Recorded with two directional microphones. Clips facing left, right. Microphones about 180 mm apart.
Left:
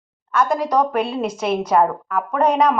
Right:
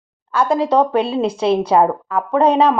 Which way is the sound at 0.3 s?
30° right (ahead or behind).